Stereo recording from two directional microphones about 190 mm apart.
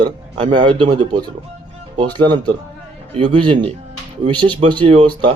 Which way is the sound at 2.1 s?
25° right (ahead or behind).